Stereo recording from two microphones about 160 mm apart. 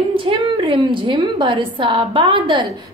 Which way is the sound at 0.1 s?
35° right (ahead or behind).